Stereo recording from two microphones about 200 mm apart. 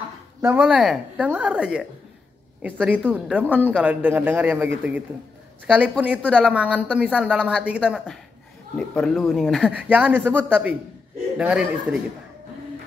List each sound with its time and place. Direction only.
0.4 s a woman's voice: 10° right (ahead or behind)
5.7 s a woman's voice: 5° right (ahead or behind)